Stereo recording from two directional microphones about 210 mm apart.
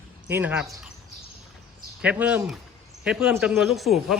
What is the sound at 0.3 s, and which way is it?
Speech, 10° right (ahead or behind).